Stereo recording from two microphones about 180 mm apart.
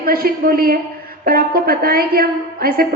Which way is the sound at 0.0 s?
55° right (ahead or behind).